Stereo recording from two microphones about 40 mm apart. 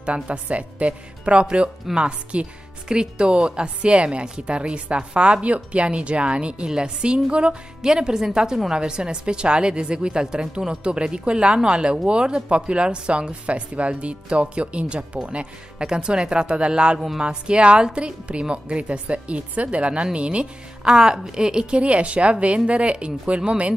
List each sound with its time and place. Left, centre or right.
0.0 s speech: right
15.8 s speech: right
20.8 s speech: centre